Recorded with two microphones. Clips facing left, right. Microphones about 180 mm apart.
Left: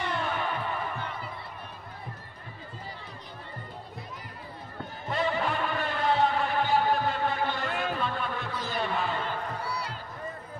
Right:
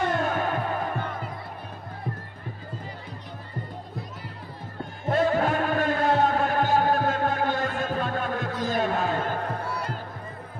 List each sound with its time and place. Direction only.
0.0 s music: 45° right (ahead or behind)
5.0 s music: 45° right (ahead or behind)